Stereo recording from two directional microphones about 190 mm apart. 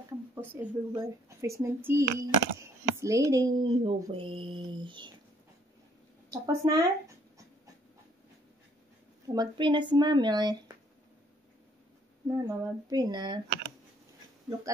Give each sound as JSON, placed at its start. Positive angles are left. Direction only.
{"t": 0.4, "sound": "speech", "side_deg": -15}
{"t": 6.3, "sound": "speech", "side_deg": -15}
{"t": 9.3, "sound": "speech", "side_deg": -25}
{"t": 12.4, "sound": "speech", "side_deg": -20}